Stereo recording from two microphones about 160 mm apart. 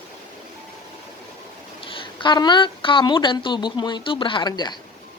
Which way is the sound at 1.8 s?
30° left (ahead or behind).